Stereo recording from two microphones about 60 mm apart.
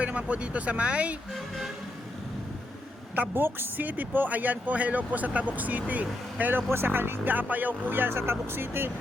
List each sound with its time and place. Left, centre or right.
0.0 s speech: right
1.3 s speech: centre
3.2 s speech: right